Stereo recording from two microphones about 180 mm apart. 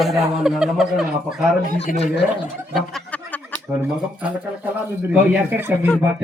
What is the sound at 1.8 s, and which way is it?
Speech, 35° left (ahead or behind).